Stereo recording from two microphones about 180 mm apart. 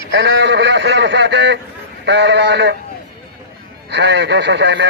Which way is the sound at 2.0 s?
80° right.